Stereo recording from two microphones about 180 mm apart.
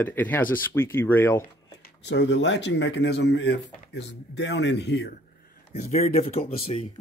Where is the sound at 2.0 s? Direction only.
75° left (ahead or behind).